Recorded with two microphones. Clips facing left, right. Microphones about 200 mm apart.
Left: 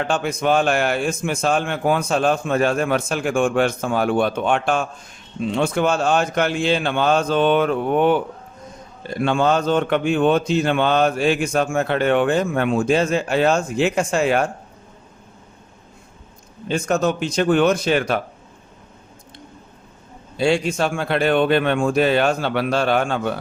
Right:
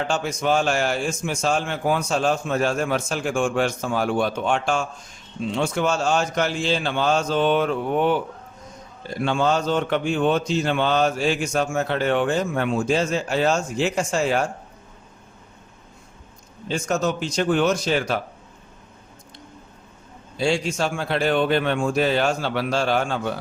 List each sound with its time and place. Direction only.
0.1 s a man's voice: 55° left (ahead or behind)
16.6 s a man's voice: 55° left (ahead or behind)
20.4 s a man's voice: 60° left (ahead or behind)